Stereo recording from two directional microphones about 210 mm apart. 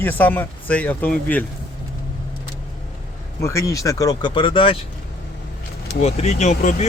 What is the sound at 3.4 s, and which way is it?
Speech, 15° left (ahead or behind).